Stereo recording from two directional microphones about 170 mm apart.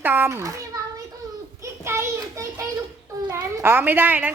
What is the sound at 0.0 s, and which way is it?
Speech, 10° right (ahead or behind).